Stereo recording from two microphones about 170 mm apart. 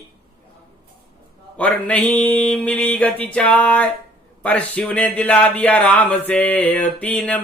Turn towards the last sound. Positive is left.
turn(degrees=5)  # may be behind; listen again after turning